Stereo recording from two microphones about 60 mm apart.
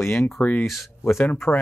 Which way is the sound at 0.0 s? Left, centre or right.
Left.